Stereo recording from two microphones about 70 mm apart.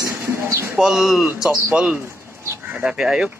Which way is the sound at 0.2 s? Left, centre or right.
Right.